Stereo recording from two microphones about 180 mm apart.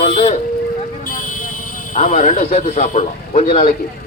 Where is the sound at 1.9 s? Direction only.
45° left (ahead or behind).